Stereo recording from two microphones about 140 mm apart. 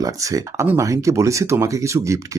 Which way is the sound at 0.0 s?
25° right (ahead or behind).